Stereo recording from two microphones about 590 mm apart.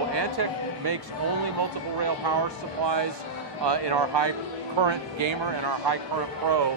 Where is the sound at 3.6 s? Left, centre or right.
Right.